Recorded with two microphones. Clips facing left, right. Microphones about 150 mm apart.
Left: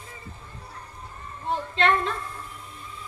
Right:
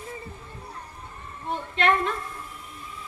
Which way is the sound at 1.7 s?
30° left (ahead or behind).